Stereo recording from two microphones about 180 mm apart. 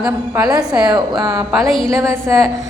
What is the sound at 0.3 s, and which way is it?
A woman's voice, 20° right (ahead or behind).